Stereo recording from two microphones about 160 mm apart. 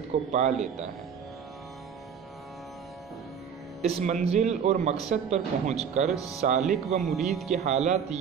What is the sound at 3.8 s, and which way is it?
Speech, 45° right (ahead or behind).